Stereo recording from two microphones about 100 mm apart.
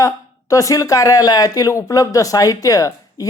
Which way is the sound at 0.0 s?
35° left (ahead or behind).